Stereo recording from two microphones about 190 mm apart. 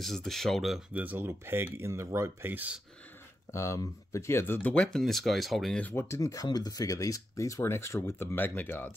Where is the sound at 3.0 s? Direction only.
10° left (ahead or behind).